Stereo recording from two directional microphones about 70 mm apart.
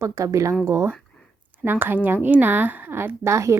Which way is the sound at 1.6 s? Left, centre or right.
Right.